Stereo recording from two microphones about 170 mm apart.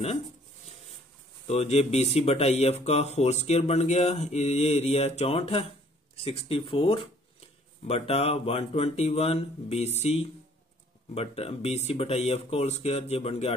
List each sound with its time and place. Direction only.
1.5 s speech: 35° left (ahead or behind)